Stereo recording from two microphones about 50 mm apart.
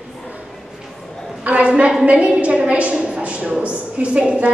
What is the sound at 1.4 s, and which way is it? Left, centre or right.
A woman's voice, right.